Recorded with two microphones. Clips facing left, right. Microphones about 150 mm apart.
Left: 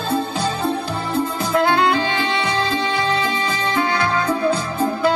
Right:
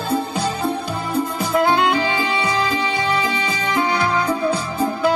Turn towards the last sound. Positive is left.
turn(degrees=-10)  # may be behind; listen again after turning